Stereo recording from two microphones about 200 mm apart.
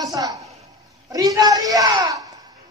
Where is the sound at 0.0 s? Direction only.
15° right (ahead or behind).